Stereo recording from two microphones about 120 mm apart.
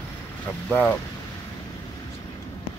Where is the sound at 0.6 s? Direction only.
20° left (ahead or behind).